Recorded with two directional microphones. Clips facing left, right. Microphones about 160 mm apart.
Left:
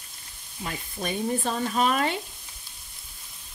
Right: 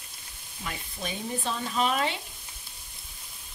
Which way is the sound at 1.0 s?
50° left (ahead or behind).